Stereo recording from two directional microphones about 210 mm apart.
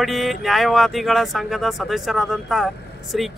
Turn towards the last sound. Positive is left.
turn(degrees=0)  # may be behind; listen again after turning